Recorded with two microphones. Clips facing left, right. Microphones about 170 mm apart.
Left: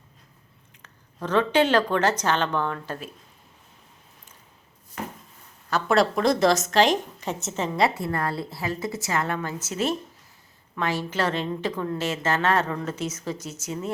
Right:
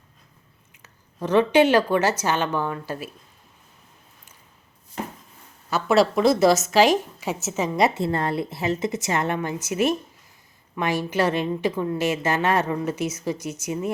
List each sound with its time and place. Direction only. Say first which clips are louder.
0.7 s a woman's voice: left 1 dB; 10° right (ahead or behind)
5.7 s a woman's voice: right 2 dB; 5° right (ahead or behind)
7.8 s a woman's voice: right 2 dB; 25° right (ahead or behind)